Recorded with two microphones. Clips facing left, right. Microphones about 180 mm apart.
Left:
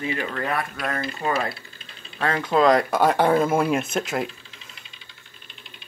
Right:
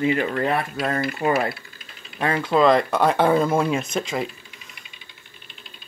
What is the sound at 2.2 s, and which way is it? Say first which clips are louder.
Speech: right 1 dB; 10° right (ahead or behind).